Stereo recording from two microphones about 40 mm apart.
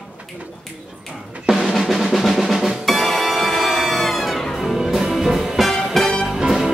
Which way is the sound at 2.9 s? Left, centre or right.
Centre.